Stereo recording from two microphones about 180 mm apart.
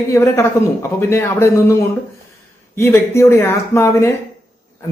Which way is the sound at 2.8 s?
15° left (ahead or behind).